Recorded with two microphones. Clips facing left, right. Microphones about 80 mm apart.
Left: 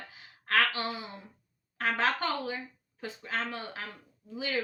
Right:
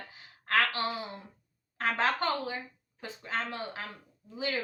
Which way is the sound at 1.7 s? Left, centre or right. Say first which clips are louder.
Even; right.